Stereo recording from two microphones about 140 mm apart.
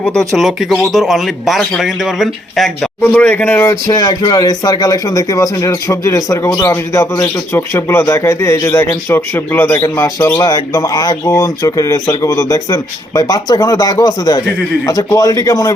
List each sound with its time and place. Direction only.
0.0 s speech: 5° left (ahead or behind); by 15.7 s 25° left (ahead or behind)